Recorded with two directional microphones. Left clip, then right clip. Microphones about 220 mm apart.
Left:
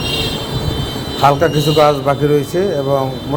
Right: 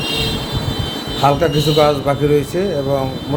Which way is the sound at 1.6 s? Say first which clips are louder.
Left 2 dB; 5° right (ahead or behind).